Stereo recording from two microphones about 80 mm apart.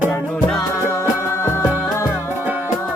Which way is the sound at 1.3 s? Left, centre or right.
Left.